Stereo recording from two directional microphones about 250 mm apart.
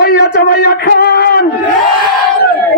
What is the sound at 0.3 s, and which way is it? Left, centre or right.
A man's voice, left.